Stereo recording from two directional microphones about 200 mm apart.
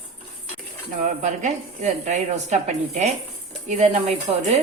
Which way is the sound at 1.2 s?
35° right (ahead or behind).